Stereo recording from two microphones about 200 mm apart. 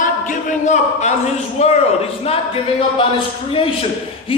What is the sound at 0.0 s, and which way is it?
A man's voice, 40° left (ahead or behind).